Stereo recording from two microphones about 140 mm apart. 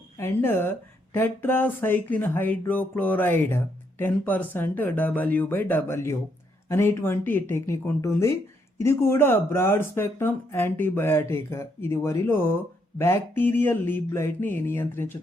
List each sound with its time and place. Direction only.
0.2 s speech: 15° left (ahead or behind)